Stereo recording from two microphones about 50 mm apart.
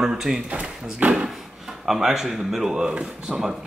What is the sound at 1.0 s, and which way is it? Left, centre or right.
Speech, right.